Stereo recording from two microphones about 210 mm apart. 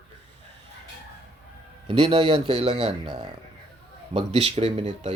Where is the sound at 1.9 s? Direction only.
25° right (ahead or behind).